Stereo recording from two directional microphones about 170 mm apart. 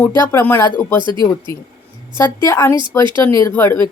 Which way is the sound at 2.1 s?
15° left (ahead or behind).